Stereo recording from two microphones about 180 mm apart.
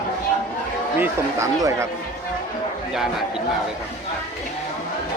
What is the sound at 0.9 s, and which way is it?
Speech, 15° right (ahead or behind).